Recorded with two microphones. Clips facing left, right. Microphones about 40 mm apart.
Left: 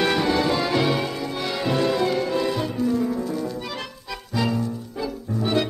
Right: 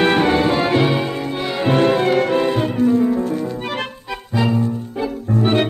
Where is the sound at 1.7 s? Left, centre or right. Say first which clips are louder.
Right 7 dB; right.